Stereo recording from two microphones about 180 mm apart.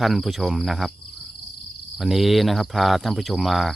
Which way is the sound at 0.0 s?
Centre (ahead or behind).